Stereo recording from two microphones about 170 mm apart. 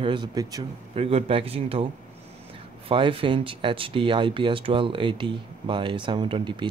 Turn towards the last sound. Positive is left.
turn(degrees=-25)  # may be behind; listen again after turning